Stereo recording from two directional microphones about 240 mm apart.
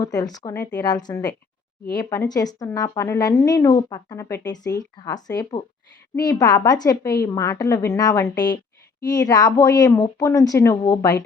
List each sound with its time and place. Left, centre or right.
0.0 s a woman's voice: centre